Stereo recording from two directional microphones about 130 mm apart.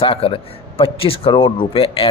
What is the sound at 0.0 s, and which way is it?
Speech, 45° left (ahead or behind).